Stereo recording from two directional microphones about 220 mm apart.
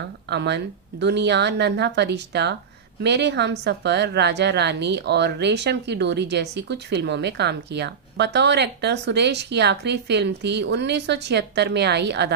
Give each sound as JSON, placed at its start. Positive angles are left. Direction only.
{"t": 0.3, "sound": "a woman's voice", "side_deg": -50}